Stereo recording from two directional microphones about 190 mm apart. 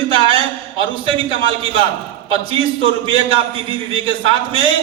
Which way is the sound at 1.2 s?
25° left (ahead or behind).